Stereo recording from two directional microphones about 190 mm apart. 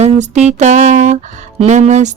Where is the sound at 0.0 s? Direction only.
35° right (ahead or behind).